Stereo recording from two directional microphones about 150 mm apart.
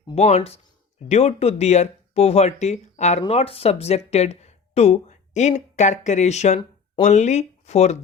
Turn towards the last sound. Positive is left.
turn(degrees=45)  # may be behind; listen again after turning